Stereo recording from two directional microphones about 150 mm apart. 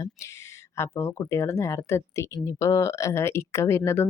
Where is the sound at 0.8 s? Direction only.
15° left (ahead or behind).